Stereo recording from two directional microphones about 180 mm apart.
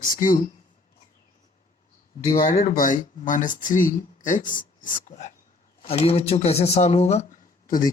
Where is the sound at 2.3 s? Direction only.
40° left (ahead or behind).